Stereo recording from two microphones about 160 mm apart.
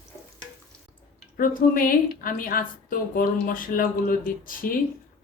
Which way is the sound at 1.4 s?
60° left (ahead or behind).